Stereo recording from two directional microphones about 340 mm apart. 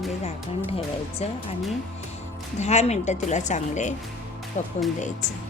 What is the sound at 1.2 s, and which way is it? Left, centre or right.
Speech, centre.